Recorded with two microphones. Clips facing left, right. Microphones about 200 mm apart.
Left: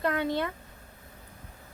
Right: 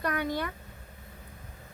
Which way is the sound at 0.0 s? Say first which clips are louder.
Left 3 dB; 25° left (ahead or behind).